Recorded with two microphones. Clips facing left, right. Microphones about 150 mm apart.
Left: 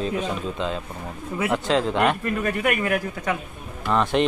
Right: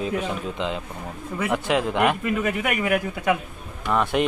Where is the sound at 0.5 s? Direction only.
15° right (ahead or behind).